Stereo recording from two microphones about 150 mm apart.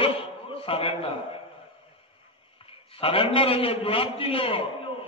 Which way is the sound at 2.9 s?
35° left (ahead or behind).